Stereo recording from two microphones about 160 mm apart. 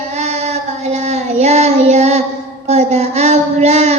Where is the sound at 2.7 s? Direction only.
45° right (ahead or behind).